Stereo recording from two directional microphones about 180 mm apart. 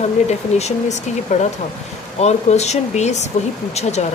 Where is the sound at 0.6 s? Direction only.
40° left (ahead or behind).